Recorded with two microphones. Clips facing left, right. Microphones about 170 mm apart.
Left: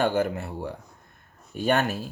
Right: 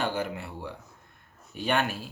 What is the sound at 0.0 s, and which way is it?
Speech, 50° left (ahead or behind).